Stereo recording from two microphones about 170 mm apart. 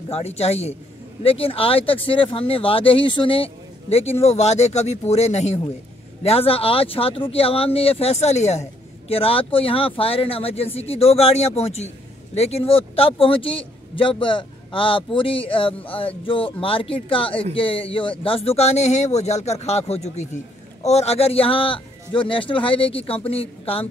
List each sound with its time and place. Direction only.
0.1 s speech: 40° left (ahead or behind)